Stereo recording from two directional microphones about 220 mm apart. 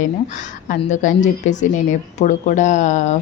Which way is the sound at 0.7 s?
35° left (ahead or behind).